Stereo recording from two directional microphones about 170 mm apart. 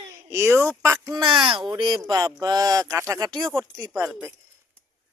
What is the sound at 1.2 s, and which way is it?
Speech, 30° right (ahead or behind).